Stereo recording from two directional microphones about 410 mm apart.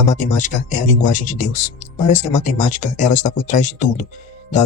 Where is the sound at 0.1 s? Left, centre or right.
Centre.